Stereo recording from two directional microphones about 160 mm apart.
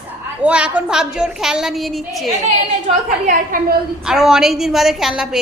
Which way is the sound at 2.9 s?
50° right (ahead or behind).